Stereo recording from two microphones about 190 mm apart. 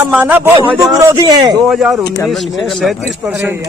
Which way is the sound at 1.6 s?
Centre (ahead or behind).